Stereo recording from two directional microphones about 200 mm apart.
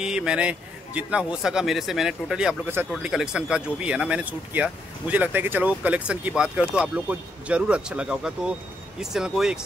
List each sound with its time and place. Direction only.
0.0 s speech: 5° right (ahead or behind)